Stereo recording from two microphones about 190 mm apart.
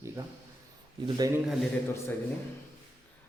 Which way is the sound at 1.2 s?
20° right (ahead or behind).